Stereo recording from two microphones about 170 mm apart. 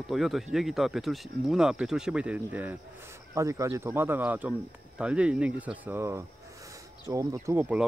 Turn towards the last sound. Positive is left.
turn(degrees=-10)  # may be behind; listen again after turning